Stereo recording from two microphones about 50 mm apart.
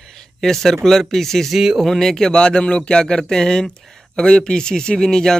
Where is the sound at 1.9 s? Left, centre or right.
Centre.